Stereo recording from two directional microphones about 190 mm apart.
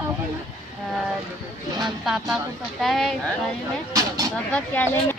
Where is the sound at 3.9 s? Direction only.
20° right (ahead or behind).